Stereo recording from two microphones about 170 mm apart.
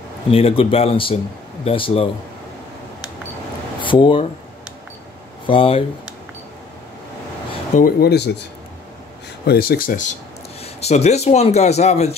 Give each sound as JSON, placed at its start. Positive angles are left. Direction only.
{"t": 0.3, "sound": "speech", "side_deg": 35}
{"t": 3.8, "sound": "speech", "side_deg": 30}
{"t": 5.5, "sound": "speech", "side_deg": 30}
{"t": 7.7, "sound": "speech", "side_deg": 60}
{"t": 9.5, "sound": "speech", "side_deg": 65}
{"t": 10.6, "sound": "speech", "side_deg": 40}